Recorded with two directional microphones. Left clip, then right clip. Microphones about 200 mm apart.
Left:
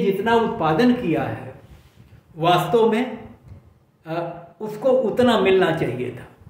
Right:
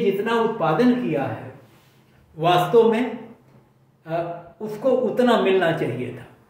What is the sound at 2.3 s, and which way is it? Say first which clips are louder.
Speech: right 1 dB; 20° left (ahead or behind).